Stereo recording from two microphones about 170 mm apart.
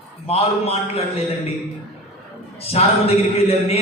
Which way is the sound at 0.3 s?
35° left (ahead or behind).